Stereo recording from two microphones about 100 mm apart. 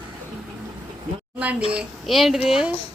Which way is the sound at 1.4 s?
15° right (ahead or behind).